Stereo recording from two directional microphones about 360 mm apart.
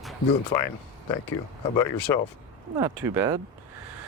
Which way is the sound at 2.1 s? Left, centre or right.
Centre.